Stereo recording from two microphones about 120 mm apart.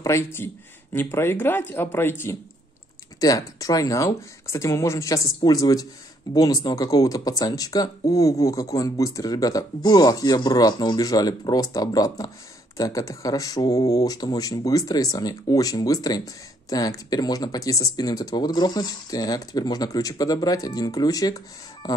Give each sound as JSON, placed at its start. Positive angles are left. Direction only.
{"t": 0.0, "sound": "speech", "side_deg": 25}
{"t": 3.2, "sound": "speech", "side_deg": 30}